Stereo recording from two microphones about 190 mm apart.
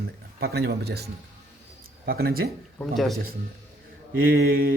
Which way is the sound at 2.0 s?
55° right (ahead or behind).